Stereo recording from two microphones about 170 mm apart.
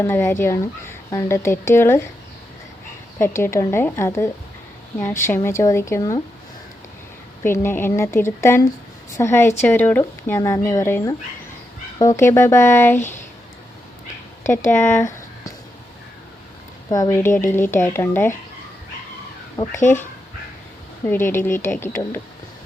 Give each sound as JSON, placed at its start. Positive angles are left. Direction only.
{"t": 0.0, "sound": "speech", "side_deg": 15}
{"t": 3.2, "sound": "speech", "side_deg": 15}
{"t": 7.4, "sound": "speech", "side_deg": 15}
{"t": 14.4, "sound": "speech", "side_deg": 15}
{"t": 16.9, "sound": "speech", "side_deg": 20}
{"t": 19.5, "sound": "speech", "side_deg": 15}
{"t": 21.1, "sound": "speech", "side_deg": 10}